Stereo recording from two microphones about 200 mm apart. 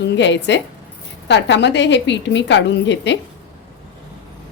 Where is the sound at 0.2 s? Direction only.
60° left (ahead or behind).